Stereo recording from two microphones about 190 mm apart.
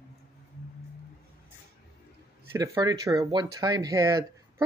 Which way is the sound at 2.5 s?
20° right (ahead or behind).